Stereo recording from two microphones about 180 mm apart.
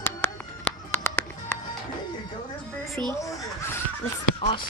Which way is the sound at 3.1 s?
15° left (ahead or behind).